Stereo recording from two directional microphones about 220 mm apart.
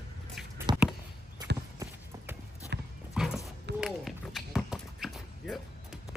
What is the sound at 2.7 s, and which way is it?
Horse, 50° right (ahead or behind).